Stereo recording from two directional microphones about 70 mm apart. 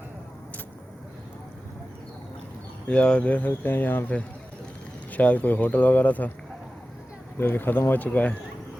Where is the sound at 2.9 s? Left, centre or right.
Centre.